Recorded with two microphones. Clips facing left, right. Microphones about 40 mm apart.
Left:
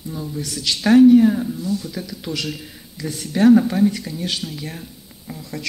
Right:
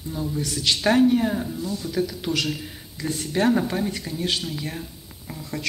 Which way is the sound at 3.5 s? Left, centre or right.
Centre.